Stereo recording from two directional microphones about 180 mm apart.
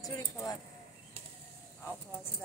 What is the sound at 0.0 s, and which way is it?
Speech, 20° left (ahead or behind).